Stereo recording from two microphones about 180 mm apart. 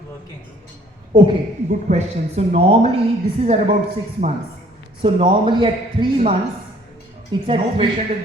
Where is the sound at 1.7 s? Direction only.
40° right (ahead or behind).